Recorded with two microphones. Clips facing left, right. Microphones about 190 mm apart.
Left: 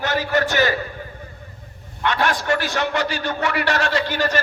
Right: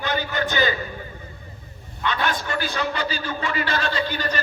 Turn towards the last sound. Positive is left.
turn(degrees=80)